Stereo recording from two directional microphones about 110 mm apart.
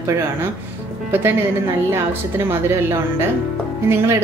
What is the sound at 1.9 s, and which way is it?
A woman's voice, 20° right (ahead or behind).